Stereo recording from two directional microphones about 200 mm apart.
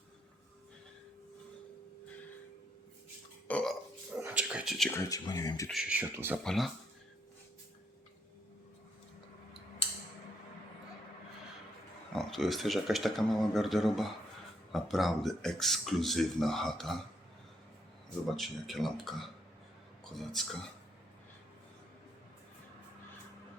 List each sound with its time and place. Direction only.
3.4 s burping: 5° left (ahead or behind)
4.2 s a sound: 10° right (ahead or behind)
4.9 s speech: 15° left (ahead or behind)
5.6 s speech: 5° right (ahead or behind)
6.4 s speech: centre (ahead or behind)
12.1 s speech: centre (ahead or behind)
18.3 s speech: centre (ahead or behind)